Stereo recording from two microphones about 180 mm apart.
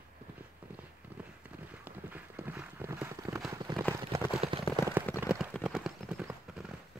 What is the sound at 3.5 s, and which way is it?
Clip-clop, 25° right (ahead or behind).